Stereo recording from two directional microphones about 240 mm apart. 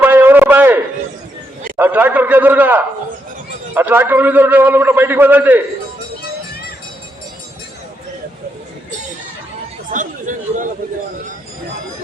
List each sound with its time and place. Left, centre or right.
0.0 s a sound: centre
1.7 s a man's voice: centre
9.9 s speech: right